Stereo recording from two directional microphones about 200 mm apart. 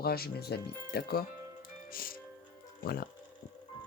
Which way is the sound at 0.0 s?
50° left (ahead or behind).